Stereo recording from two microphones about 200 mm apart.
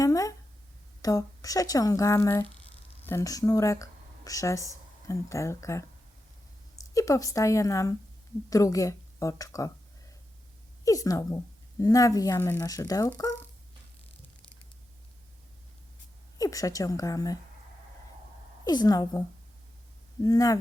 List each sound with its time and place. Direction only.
0.0 s a sound: 15° left (ahead or behind)
1.0 s a woman's voice: 15° left (ahead or behind)
10.8 s speech: 15° left (ahead or behind)
16.4 s speech: 15° left (ahead or behind)
18.6 s a woman's voice: 20° left (ahead or behind)
20.2 s speech: 15° left (ahead or behind)